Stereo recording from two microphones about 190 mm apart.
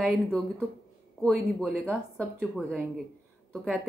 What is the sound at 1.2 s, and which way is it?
A woman's voice, centre (ahead or behind).